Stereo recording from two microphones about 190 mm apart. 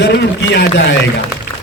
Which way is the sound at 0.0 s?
65° left (ahead or behind).